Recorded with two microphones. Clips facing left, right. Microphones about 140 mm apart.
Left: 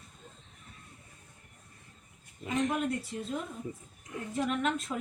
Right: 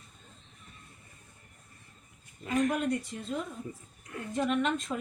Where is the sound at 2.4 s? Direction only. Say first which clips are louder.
Right 2 dB; 20° left (ahead or behind).